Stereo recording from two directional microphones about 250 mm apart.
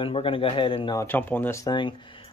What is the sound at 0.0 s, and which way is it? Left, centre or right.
Speech, left.